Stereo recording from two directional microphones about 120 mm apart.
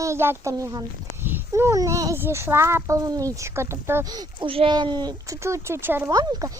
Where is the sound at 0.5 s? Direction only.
30° right (ahead or behind).